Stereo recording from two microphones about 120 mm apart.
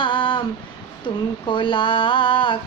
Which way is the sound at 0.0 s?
40° left (ahead or behind).